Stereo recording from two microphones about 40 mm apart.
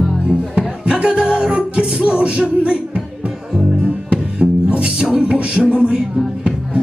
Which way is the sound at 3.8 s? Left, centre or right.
Right.